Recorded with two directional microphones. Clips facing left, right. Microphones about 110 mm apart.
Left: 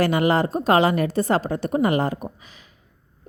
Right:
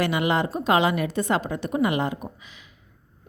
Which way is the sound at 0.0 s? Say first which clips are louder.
Left 4 dB; 40° left (ahead or behind).